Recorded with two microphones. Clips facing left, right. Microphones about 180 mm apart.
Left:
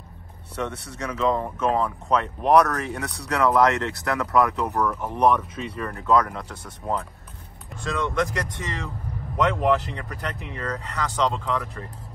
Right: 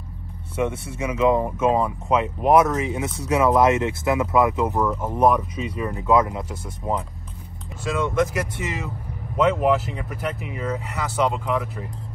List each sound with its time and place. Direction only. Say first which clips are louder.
0.6 s speech: right 5 dB; 15° right (ahead or behind)
2.9 s speech: right 5 dB; 15° right (ahead or behind)
5.1 s speech: right 2 dB; 5° right (ahead or behind)